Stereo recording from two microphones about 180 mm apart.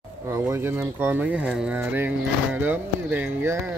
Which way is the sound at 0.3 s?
15° right (ahead or behind).